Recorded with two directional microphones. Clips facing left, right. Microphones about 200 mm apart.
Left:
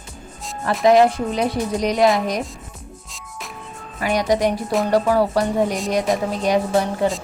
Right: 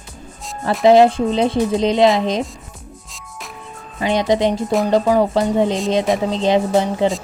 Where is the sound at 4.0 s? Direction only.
25° right (ahead or behind).